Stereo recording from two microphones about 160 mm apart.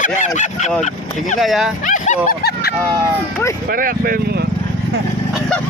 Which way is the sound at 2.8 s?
20° right (ahead or behind).